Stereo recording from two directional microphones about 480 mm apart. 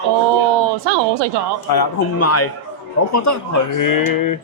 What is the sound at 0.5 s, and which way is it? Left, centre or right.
Speech, right.